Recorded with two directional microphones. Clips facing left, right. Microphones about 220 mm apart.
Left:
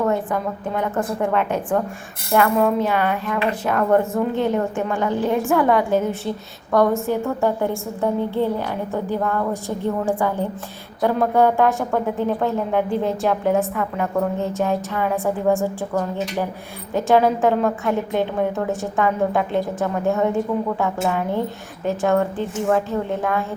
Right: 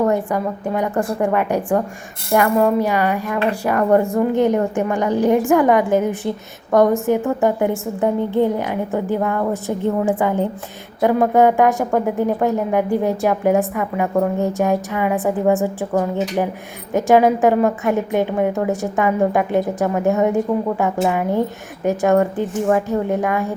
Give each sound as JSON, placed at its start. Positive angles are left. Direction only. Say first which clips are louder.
{"t": 0.0, "sound": "a woman's voice", "louder": "right 3 dB", "side_deg": -15}
{"t": 2.6, "sound": "speech", "louder": "right 3 dB", "side_deg": 0}
{"t": 2.8, "sound": "a woman's voice", "louder": "right 2 dB", "side_deg": -10}